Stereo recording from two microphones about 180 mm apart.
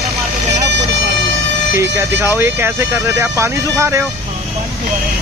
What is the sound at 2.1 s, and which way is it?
Speech, 15° right (ahead or behind).